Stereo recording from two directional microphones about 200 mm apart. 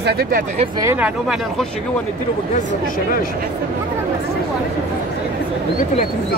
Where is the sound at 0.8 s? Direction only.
10° right (ahead or behind).